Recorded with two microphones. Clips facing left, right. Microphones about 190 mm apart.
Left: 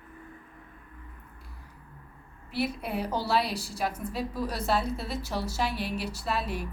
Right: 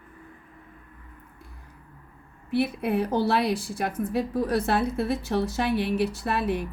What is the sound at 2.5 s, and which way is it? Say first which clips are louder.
A woman's voice: right 6 dB; 55° right (ahead or behind).